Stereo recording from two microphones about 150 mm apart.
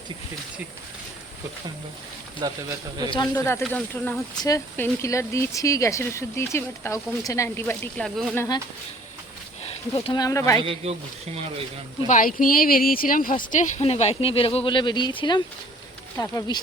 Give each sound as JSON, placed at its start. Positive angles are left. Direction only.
{"t": 2.4, "sound": "speech", "side_deg": -25}
{"t": 3.1, "sound": "speech", "side_deg": 30}
{"t": 3.7, "sound": "speech", "side_deg": 10}
{"t": 4.4, "sound": "speech", "side_deg": 25}
{"t": 8.0, "sound": "speech", "side_deg": 0}
{"t": 8.4, "sound": "speech", "side_deg": 25}
{"t": 9.9, "sound": "speech", "side_deg": 40}
{"t": 10.2, "sound": "speech", "side_deg": 20}
{"t": 10.6, "sound": "speech", "side_deg": -40}
{"t": 12.0, "sound": "speech", "side_deg": 60}
{"t": 13.5, "sound": "speech", "side_deg": 55}
{"t": 13.8, "sound": "speech", "side_deg": 45}
{"t": 16.1, "sound": "speech", "side_deg": 20}